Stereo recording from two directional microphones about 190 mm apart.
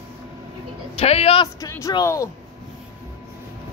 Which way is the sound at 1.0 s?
30° left (ahead or behind).